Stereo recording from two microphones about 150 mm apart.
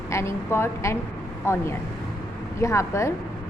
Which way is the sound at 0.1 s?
20° left (ahead or behind).